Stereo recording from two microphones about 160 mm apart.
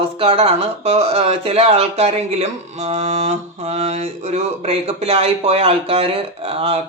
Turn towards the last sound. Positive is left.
turn(degrees=-35)  # may be behind; listen again after turning